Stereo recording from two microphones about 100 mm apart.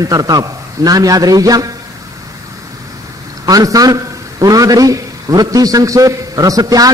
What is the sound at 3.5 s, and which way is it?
A man's voice, 35° right (ahead or behind).